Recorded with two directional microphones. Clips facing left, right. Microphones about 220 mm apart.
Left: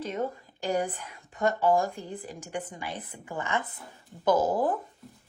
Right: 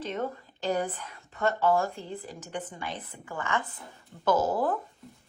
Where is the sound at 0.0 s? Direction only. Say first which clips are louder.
Left 1 dB; 10° left (ahead or behind).